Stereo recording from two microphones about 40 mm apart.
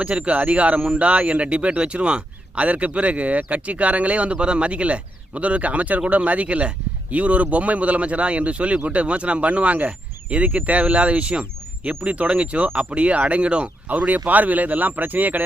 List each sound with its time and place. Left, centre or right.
0.0 s speech: right